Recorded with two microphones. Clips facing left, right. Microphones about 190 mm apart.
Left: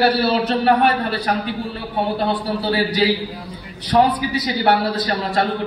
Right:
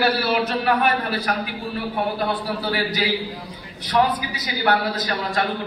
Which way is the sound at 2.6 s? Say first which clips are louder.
Left 7 dB; 30° left (ahead or behind).